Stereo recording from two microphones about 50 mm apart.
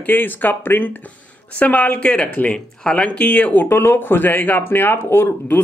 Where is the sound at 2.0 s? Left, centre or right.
Left.